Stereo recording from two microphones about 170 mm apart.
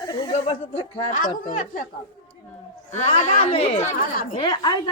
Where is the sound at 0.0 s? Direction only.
25° left (ahead or behind).